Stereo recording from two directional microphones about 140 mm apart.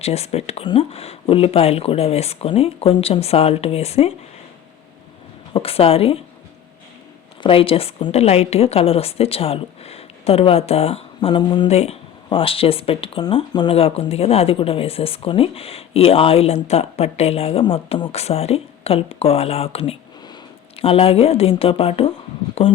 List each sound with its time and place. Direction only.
0.0 s speech: 50° left (ahead or behind)
5.5 s speech: 45° left (ahead or behind)
7.4 s speech: 40° left (ahead or behind)
11.7 s speech: 50° left (ahead or behind)